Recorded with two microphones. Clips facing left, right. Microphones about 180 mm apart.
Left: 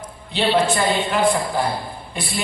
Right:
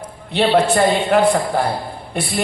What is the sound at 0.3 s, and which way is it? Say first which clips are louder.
A man's voice: right 4 dB; 60° right (ahead or behind).